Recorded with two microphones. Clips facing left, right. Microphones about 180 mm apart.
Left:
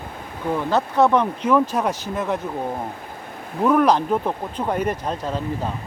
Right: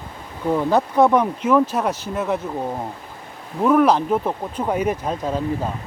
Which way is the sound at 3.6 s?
Centre (ahead or behind).